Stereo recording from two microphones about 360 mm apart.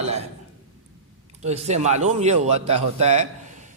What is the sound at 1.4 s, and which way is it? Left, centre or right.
A man's voice, centre.